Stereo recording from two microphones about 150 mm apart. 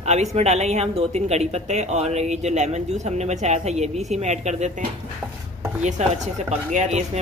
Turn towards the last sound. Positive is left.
turn(degrees=-50)  # may be behind; listen again after turning